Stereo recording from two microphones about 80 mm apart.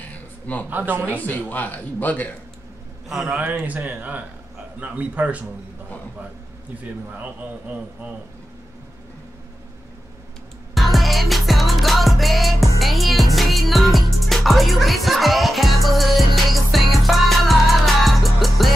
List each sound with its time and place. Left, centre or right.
0.0 s a sound: centre
0.7 s speech: right
1.1 s speech: centre
3.1 s a man's voice: centre
3.3 s speech: right
10.7 s music: centre